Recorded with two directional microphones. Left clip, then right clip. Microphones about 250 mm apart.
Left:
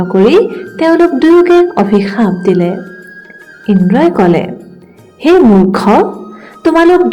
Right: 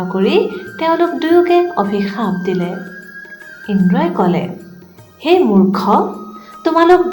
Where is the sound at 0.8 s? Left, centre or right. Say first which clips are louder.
Left 6 dB; left.